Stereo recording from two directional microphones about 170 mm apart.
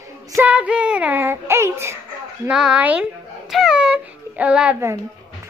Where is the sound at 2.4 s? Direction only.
5° right (ahead or behind).